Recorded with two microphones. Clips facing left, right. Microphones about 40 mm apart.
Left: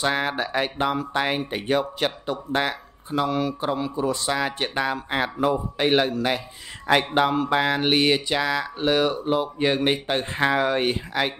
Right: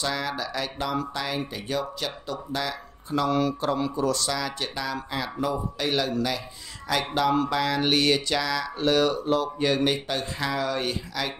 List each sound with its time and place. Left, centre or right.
0.0 s speech: left
3.3 s a sound: centre
3.9 s speech: left